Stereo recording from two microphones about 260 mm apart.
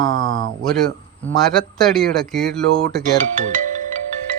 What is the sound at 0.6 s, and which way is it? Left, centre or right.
Speech, centre.